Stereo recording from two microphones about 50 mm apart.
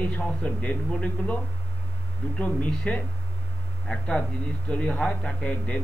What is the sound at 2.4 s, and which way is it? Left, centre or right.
A man's voice, left.